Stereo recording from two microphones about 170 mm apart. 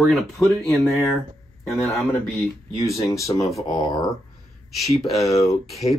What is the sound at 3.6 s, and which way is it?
Speech, 25° left (ahead or behind).